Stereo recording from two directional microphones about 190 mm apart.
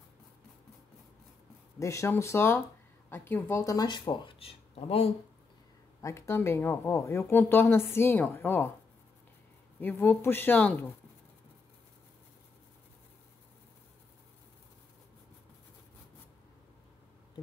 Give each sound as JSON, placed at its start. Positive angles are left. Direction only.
{"t": 1.8, "sound": "speech", "side_deg": 15}
{"t": 5.9, "sound": "speech", "side_deg": 15}
{"t": 9.8, "sound": "speech", "side_deg": 10}